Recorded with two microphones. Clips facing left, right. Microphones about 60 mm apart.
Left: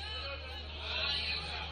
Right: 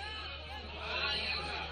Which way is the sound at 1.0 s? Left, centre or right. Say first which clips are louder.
Right 1 dB; centre.